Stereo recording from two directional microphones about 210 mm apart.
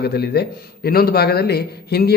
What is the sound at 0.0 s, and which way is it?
A man's voice, 50° left (ahead or behind).